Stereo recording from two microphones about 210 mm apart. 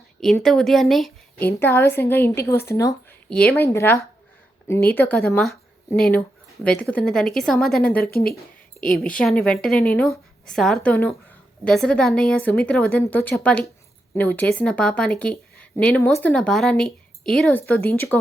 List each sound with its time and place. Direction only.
0.2 s a woman's voice: centre (ahead or behind)
1.5 s a woman's voice: 10° left (ahead or behind)
8.1 s speech: 45° left (ahead or behind)
8.8 s a woman's voice: 5° left (ahead or behind)